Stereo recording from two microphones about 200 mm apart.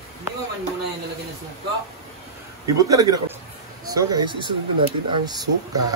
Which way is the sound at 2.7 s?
15° right (ahead or behind).